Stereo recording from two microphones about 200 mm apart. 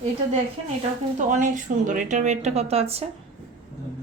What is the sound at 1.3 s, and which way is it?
Speech, 40° right (ahead or behind).